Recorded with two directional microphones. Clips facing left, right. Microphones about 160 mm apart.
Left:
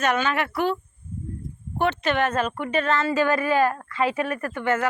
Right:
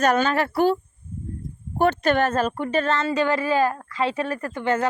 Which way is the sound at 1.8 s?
40° right (ahead or behind).